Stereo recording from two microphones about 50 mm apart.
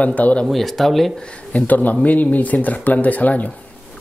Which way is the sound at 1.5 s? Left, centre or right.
Left.